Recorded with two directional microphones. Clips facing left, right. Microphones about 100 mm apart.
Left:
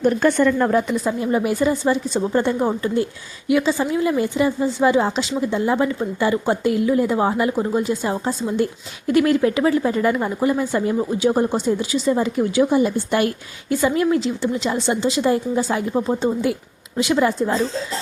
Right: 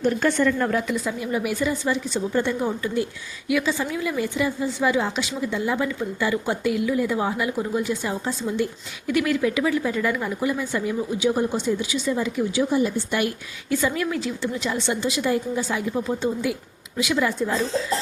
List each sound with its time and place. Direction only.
0.0 s a woman's voice: 45° left (ahead or behind)
12.4 s speech: 55° left (ahead or behind)
13.7 s a woman's voice: 25° left (ahead or behind)